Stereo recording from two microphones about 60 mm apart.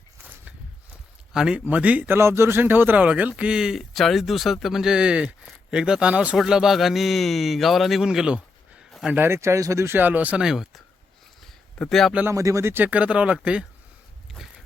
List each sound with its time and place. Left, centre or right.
1.3 s speech: centre
1.5 s speech: right
2.0 s speech: right; by 6.3 s centre
6.3 s speech: centre
9.1 s speech: right
9.4 s speech: right
10.0 s speech: right
10.3 s speech: centre
11.4 s a sound: centre
12.3 s speech: right
12.6 s speech: right
12.9 s speech: right